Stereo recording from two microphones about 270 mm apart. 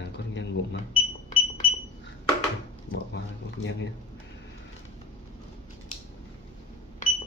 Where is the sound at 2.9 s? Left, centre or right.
Left.